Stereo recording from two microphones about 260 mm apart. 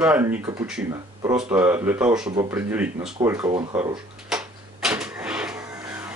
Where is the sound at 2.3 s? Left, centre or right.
Centre.